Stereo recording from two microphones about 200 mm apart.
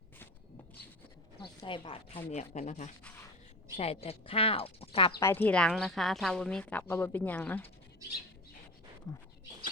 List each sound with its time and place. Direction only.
1.4 s speech: 25° left (ahead or behind)
5.2 s a woman's voice: 10° left (ahead or behind)